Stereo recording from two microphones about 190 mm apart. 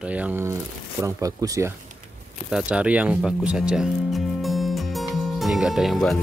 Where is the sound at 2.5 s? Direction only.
5° right (ahead or behind).